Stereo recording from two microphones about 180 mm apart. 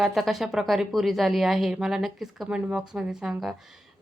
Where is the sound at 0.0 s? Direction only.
Centre (ahead or behind).